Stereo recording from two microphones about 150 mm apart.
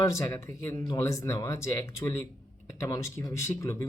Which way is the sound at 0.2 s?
15° left (ahead or behind).